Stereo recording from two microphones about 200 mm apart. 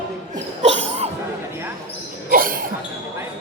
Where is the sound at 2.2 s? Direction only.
45° right (ahead or behind).